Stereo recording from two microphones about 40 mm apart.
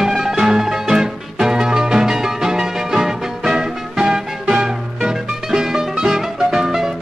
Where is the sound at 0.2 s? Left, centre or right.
Centre.